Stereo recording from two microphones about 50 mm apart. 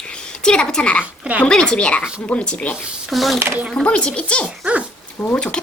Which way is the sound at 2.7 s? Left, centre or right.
Centre.